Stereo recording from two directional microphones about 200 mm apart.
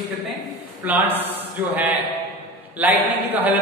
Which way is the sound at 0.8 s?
10° right (ahead or behind).